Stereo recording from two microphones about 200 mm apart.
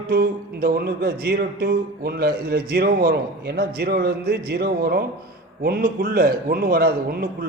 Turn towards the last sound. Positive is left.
turn(degrees=-50)  # may be behind; listen again after turning